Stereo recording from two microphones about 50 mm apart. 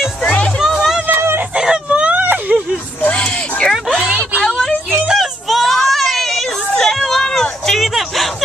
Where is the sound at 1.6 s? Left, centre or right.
Centre.